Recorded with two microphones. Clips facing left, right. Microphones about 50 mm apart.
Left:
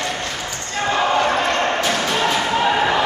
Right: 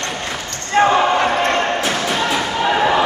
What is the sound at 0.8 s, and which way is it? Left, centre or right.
Basketball bounce, right.